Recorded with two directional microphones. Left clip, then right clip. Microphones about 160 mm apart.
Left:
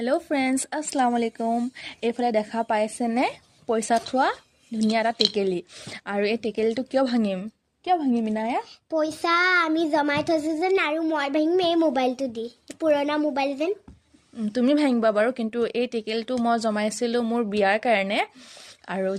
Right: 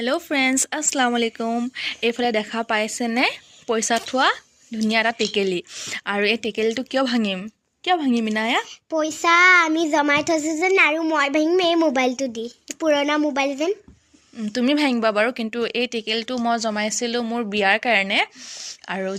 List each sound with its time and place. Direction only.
0.0 s speech: 5° left (ahead or behind)
7.9 s speech: 10° right (ahead or behind)
8.9 s a child's voice: 50° right (ahead or behind)
14.3 s speech: 5° left (ahead or behind)